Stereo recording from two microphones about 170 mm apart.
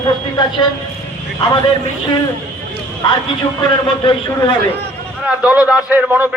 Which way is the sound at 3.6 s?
30° left (ahead or behind).